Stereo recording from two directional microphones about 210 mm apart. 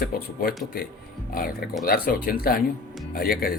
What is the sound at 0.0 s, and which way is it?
Speech, 45° left (ahead or behind).